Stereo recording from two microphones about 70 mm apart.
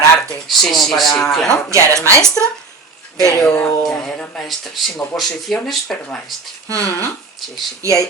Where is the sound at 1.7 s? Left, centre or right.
Right.